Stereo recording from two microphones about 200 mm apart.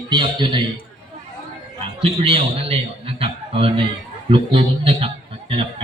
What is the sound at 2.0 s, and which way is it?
A man's voice, 30° right (ahead or behind).